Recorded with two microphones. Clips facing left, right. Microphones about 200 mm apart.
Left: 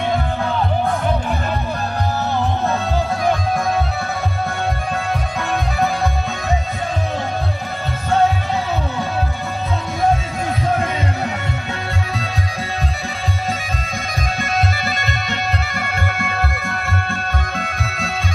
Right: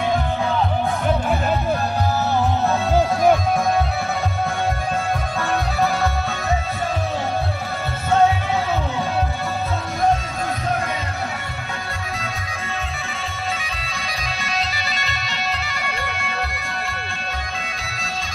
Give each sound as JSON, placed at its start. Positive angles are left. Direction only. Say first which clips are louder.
{"t": 2.9, "sound": "music", "louder": "right 6 dB", "side_deg": -15}
{"t": 14.4, "sound": "music", "louder": "left 6 dB", "side_deg": 50}